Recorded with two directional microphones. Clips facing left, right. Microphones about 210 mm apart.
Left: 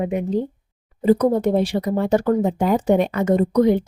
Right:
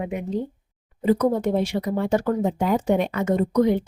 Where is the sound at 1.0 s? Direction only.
35° left (ahead or behind).